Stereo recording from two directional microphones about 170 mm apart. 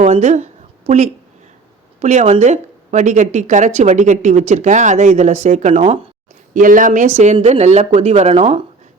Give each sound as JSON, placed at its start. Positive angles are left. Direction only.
{"t": 0.0, "sound": "a sound", "side_deg": -40}
{"t": 2.0, "sound": "speech", "side_deg": -40}
{"t": 6.5, "sound": "speech", "side_deg": -50}